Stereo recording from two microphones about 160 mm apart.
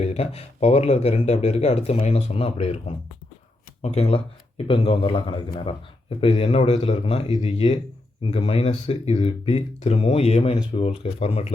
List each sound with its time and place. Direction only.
0.0 s speech: 40° left (ahead or behind)